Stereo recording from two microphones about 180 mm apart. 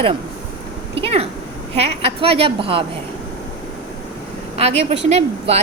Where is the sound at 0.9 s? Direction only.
35° right (ahead or behind).